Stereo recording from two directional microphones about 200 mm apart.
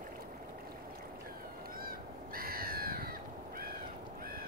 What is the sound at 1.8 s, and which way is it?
Crow, 45° right (ahead or behind).